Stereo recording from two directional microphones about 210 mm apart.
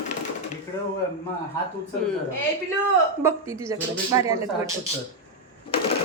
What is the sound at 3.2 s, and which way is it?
A woman's voice, 15° right (ahead or behind).